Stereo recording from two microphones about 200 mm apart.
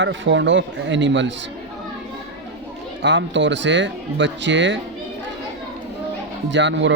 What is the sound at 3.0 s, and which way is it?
Speech, 65° right (ahead or behind).